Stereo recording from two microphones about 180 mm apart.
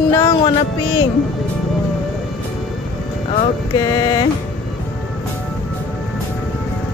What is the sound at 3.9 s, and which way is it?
Music, 25° left (ahead or behind).